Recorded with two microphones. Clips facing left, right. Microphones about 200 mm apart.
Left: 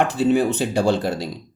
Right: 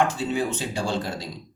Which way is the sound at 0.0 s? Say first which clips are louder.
Left 6 dB; 65° left (ahead or behind).